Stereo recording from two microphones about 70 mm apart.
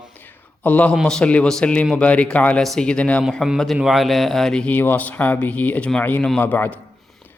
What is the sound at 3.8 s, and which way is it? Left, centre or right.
Speech, centre.